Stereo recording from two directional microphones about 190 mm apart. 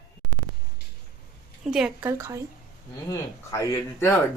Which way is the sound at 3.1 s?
20° left (ahead or behind).